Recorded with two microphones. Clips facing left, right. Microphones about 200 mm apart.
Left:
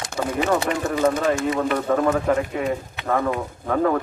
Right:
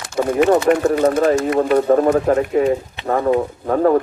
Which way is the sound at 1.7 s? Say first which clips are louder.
Right 9 dB; 40° right (ahead or behind).